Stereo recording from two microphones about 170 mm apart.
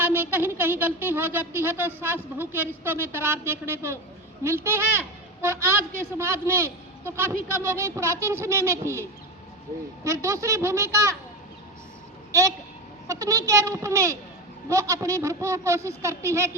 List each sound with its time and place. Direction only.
0.0 s speech: 10° right (ahead or behind)
13.1 s speech: 20° right (ahead or behind)